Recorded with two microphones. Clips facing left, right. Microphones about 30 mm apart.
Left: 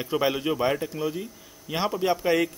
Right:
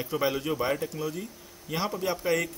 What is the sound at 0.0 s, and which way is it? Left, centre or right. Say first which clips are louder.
A man's voice: left 3 dB; left.